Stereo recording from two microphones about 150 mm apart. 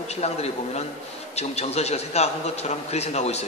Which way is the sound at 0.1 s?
45° left (ahead or behind).